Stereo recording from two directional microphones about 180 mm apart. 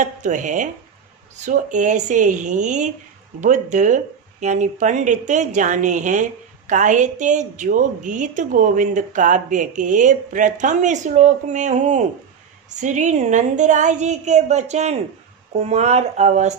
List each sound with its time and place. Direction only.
0.0 s a woman's voice: 45° right (ahead or behind)